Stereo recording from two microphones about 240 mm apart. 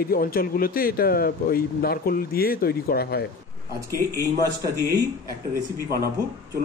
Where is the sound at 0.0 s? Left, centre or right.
Left.